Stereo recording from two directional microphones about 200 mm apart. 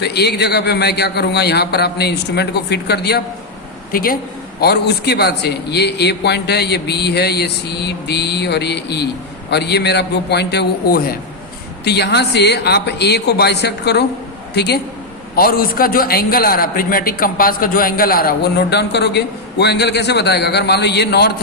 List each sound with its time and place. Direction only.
0.0 s a man's voice: 55° left (ahead or behind)